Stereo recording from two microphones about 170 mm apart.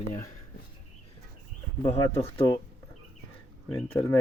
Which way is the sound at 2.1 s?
15° left (ahead or behind).